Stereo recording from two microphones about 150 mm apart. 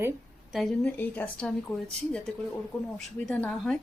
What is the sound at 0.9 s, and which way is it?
Speech, 10° left (ahead or behind).